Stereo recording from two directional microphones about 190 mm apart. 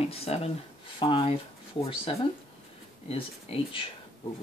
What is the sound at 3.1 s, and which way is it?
Speech, 30° left (ahead or behind).